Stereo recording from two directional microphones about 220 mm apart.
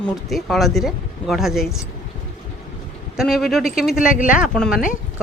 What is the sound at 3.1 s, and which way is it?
A man's voice, centre (ahead or behind).